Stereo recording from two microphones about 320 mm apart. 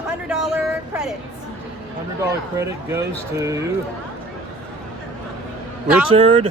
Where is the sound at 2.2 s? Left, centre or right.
Centre.